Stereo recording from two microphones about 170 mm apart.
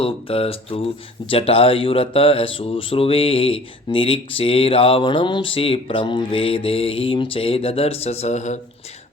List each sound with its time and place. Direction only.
0.0 s speech: 35° left (ahead or behind)